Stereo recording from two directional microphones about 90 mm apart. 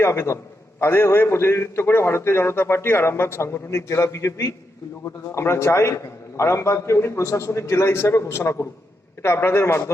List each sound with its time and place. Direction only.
0.0 s a man's voice: 30° left (ahead or behind)